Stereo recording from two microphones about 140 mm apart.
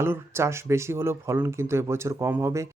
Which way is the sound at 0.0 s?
20° right (ahead or behind).